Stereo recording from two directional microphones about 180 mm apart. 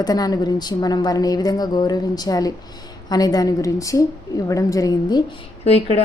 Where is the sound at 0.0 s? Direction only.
20° left (ahead or behind).